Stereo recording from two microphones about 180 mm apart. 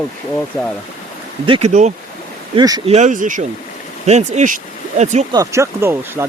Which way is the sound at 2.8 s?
40° right (ahead or behind).